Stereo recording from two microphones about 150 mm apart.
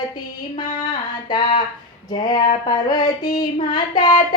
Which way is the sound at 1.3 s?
30° left (ahead or behind).